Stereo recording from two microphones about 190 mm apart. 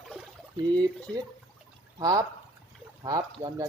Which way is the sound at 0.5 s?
20° right (ahead or behind).